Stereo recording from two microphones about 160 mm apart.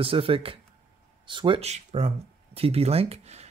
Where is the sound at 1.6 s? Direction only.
45° right (ahead or behind).